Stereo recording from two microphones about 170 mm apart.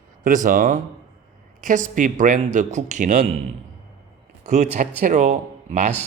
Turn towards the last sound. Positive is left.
turn(degrees=-45)  # may be behind; listen again after turning